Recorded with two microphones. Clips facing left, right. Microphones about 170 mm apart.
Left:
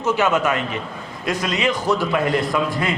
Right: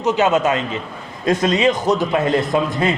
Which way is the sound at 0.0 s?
20° right (ahead or behind).